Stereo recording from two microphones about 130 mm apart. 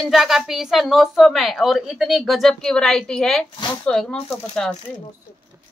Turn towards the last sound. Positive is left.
turn(degrees=5)  # may be behind; listen again after turning